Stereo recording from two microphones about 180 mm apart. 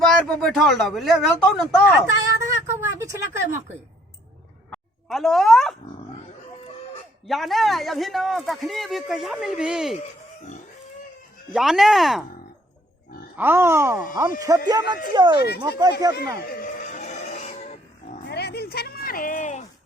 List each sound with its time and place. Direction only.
0.0 s speech: centre (ahead or behind)
2.2 s a sound: 15° right (ahead or behind)
4.7 s a sound: centre (ahead or behind)
7.3 s speech: centre (ahead or behind)
11.5 s speech: centre (ahead or behind)
13.3 s speech: 10° right (ahead or behind)
15.4 s speech: 60° left (ahead or behind)
16.0 s speech: 20° right (ahead or behind)
16.5 s wild animals: 50° left (ahead or behind)
18.3 s a sound: 65° left (ahead or behind); by 19.6 s 45° left (ahead or behind)